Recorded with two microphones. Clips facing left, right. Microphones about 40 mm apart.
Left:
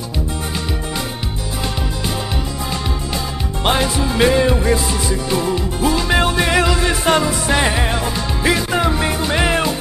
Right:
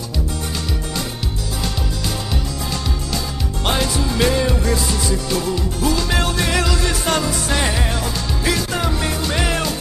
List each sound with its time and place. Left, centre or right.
3.6 s music: centre